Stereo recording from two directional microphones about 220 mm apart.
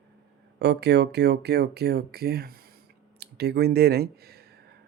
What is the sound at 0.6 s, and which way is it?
Speech, 50° right (ahead or behind).